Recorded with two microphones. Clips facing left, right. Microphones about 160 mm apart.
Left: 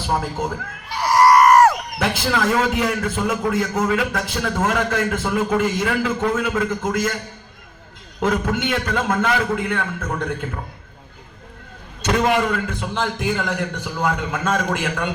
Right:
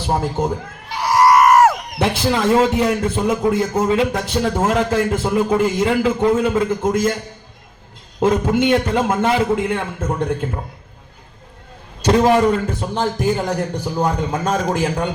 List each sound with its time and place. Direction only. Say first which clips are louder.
0.1 s a man's voice: right 4 dB; 30° right (ahead or behind)
1.1 s a sound: even; 5° right (ahead or behind)
2.0 s a man's voice: right 3 dB; 30° right (ahead or behind)
8.2 s a man's voice: right 5 dB; 30° right (ahead or behind)
12.0 s a man's voice: right 5 dB; 35° right (ahead or behind)